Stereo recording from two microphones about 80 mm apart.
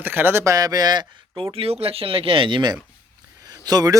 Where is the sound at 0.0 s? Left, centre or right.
Right.